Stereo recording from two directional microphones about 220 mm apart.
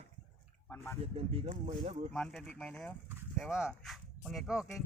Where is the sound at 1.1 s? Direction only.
25° right (ahead or behind).